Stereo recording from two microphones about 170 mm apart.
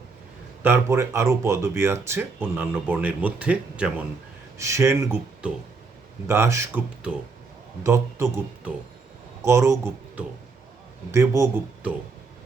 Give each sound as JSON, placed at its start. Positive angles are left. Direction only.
{"t": 0.6, "sound": "speech", "side_deg": -15}